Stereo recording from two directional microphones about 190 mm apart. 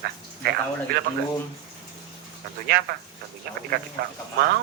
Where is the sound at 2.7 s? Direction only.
55° right (ahead or behind).